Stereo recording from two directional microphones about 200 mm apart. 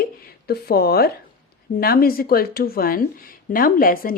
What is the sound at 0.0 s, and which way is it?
Speech, 50° left (ahead or behind).